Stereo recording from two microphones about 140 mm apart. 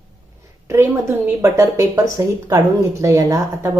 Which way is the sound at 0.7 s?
20° right (ahead or behind).